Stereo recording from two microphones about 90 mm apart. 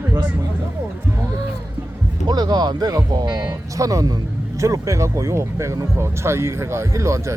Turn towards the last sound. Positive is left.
turn(degrees=-35)  # may be behind; listen again after turning